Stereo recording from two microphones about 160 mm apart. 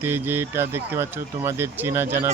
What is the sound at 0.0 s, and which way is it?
Speech, 15° right (ahead or behind).